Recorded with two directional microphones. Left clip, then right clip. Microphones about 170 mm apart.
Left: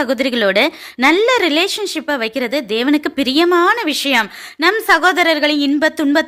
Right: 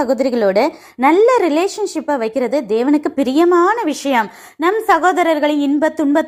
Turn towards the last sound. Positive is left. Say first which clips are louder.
# left 1 dB
turn(degrees=5)  # may be behind; listen again after turning